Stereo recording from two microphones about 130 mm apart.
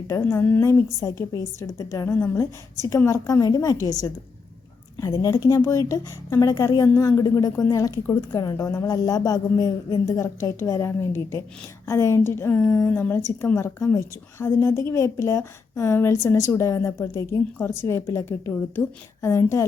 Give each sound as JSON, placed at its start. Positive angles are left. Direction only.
{"t": 0.1, "sound": "a woman's voice", "side_deg": 20}